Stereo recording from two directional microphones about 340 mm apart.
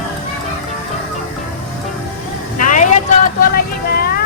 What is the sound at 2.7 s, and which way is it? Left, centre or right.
Vehicle, left.